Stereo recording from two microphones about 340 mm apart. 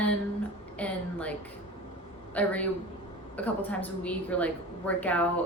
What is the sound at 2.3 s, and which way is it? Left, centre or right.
A woman's voice, centre.